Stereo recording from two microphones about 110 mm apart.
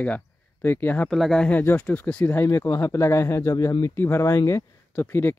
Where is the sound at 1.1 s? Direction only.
5° left (ahead or behind).